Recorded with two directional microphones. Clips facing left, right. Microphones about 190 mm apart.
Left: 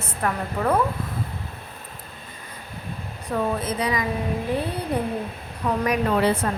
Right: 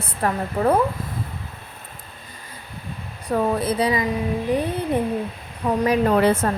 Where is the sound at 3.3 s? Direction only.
35° right (ahead or behind).